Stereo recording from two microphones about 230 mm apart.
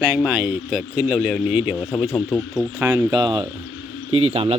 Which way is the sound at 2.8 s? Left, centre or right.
Centre.